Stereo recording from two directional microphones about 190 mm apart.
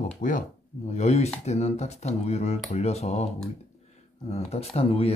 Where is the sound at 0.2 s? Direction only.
45° left (ahead or behind).